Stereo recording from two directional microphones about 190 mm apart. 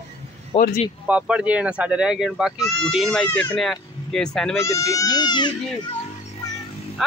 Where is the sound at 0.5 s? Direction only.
30° left (ahead or behind).